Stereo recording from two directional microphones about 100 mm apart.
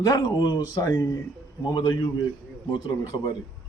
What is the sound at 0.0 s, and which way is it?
A man's voice, 40° left (ahead or behind).